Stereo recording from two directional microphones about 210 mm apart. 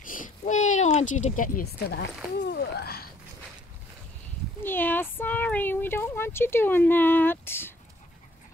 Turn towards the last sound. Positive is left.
turn(degrees=10)  # may be behind; listen again after turning